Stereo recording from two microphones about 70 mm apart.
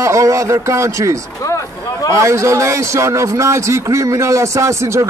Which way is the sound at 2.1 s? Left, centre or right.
Right.